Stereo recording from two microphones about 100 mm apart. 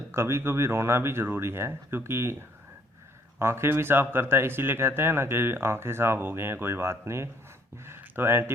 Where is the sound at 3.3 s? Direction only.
25° right (ahead or behind).